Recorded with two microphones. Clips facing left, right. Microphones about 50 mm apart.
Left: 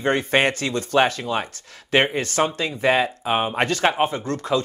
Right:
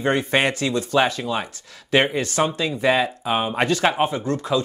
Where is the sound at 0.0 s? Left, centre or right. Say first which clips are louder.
Even; left.